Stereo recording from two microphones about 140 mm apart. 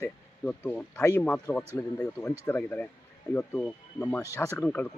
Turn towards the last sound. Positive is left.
turn(degrees=15)  # may be behind; listen again after turning